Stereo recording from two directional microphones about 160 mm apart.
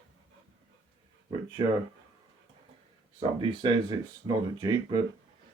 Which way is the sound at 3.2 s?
30° right (ahead or behind).